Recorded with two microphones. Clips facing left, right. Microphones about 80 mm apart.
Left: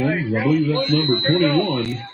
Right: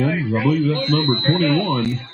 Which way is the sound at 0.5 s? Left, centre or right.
Right.